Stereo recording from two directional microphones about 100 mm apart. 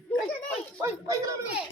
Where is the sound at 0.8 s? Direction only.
35° right (ahead or behind).